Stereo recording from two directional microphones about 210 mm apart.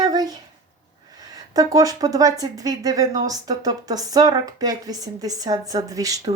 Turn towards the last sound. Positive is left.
turn(degrees=-15)  # may be behind; listen again after turning